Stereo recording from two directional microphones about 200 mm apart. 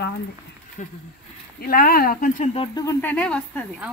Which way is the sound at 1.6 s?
50° left (ahead or behind).